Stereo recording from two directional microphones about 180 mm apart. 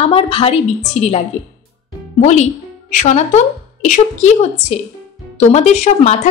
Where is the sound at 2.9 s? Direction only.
40° left (ahead or behind).